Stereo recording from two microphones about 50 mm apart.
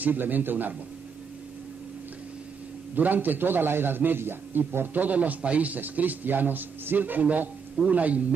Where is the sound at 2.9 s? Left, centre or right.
Right.